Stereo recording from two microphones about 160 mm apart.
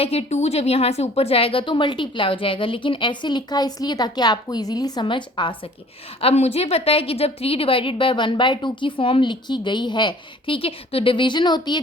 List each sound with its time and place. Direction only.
0.0 s a woman's voice: 40° left (ahead or behind)
6.2 s a woman's voice: 40° left (ahead or behind)